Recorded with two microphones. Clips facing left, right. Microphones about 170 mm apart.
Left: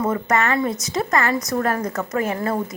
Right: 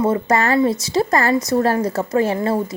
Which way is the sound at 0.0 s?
30° right (ahead or behind).